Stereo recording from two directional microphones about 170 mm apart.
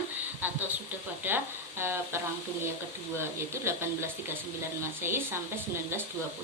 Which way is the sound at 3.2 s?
15° right (ahead or behind).